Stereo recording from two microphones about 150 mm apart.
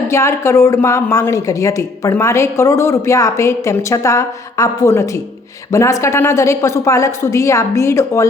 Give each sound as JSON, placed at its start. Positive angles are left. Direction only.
{"t": 0.1, "sound": "a woman's voice", "side_deg": 15}